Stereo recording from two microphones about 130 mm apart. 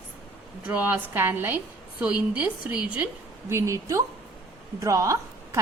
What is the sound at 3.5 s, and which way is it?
A woman's voice, 20° right (ahead or behind).